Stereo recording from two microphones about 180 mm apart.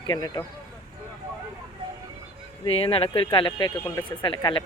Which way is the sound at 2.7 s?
30° left (ahead or behind).